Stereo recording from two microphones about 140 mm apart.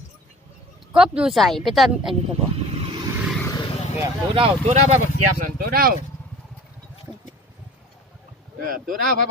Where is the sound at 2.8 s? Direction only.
35° right (ahead or behind).